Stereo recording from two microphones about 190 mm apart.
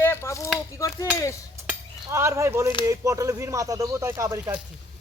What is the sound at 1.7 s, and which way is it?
Speech, 15° right (ahead or behind).